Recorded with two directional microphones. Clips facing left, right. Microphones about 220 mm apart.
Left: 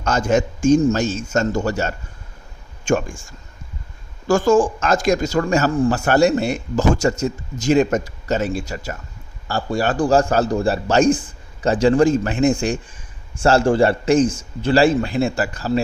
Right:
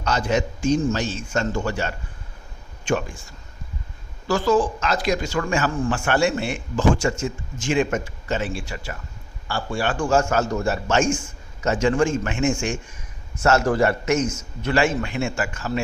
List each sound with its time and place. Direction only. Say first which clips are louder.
0.0 s a man's voice: left 4 dB; 50° left (ahead or behind)